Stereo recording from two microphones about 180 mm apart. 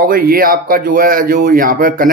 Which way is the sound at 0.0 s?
50° right (ahead or behind).